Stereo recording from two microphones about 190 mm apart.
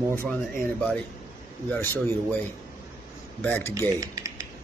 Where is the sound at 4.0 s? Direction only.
15° right (ahead or behind).